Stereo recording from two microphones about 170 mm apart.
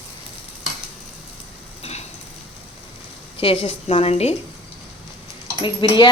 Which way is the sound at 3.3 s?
35° left (ahead or behind).